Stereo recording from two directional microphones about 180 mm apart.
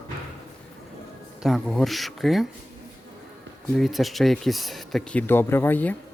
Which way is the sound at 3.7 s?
Centre (ahead or behind).